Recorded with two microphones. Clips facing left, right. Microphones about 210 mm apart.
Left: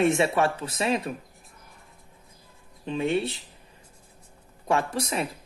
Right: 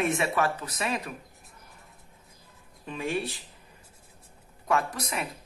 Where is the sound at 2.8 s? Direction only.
25° left (ahead or behind).